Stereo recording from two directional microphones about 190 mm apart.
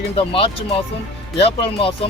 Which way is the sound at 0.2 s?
30° left (ahead or behind).